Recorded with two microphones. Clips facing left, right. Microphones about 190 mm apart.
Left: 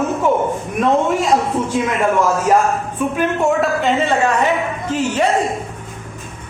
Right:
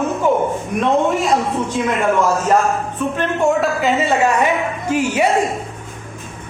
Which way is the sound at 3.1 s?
10° left (ahead or behind).